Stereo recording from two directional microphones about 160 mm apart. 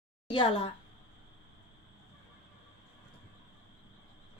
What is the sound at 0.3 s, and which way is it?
Speech, 30° left (ahead or behind).